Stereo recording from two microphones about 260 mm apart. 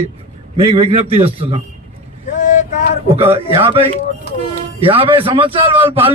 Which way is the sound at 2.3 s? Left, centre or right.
Left.